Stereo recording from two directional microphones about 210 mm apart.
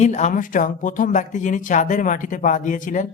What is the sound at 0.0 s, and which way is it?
Speech, 35° left (ahead or behind).